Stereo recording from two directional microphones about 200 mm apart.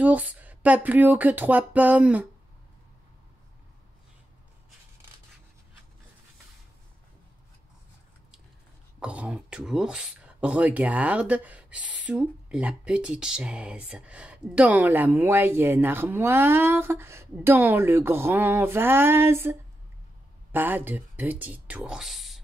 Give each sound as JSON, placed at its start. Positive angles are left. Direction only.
{"t": 0.0, "sound": "speech", "side_deg": -5}
{"t": 9.0, "sound": "speech", "side_deg": -5}
{"t": 20.5, "sound": "speech", "side_deg": -10}